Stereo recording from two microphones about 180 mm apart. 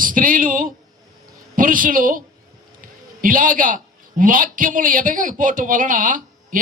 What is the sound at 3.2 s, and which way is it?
A man's voice, 50° right (ahead or behind).